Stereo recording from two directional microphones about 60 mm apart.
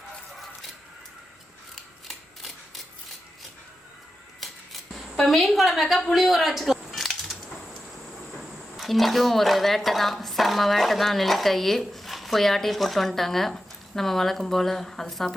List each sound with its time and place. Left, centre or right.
1.7 s scissors: centre
4.4 s scissors: centre
5.1 s a sound: centre
8.3 s a woman's voice: centre